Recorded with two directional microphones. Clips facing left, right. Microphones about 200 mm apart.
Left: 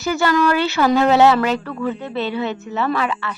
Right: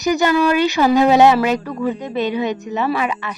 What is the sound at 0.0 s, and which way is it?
Speech, 15° right (ahead or behind).